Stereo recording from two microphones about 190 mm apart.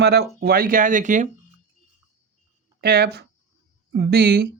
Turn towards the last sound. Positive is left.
turn(degrees=-55)  # may be behind; listen again after turning